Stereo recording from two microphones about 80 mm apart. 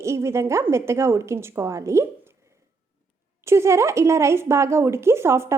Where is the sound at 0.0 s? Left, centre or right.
Right.